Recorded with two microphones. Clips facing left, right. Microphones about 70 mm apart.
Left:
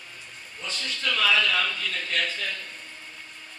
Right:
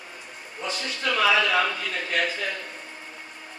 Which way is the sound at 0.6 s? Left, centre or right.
Centre.